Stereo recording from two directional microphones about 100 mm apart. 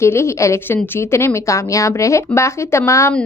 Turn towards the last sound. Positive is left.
turn(degrees=30)  # may be behind; listen again after turning